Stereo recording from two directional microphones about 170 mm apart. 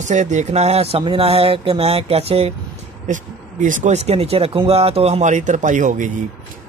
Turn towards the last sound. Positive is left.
turn(degrees=-50)  # may be behind; listen again after turning